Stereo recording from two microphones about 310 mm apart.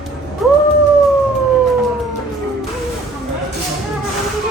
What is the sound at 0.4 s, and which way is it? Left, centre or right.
Howl, centre.